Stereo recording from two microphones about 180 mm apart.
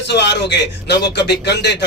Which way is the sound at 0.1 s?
70° left (ahead or behind).